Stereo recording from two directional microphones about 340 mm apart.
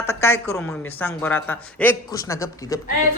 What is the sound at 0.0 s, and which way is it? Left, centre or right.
A woman's voice, centre.